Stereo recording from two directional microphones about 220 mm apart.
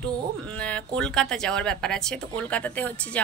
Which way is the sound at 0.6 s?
5° left (ahead or behind).